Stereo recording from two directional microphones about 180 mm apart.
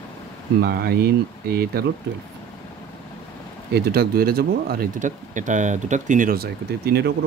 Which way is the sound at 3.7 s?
60° right (ahead or behind).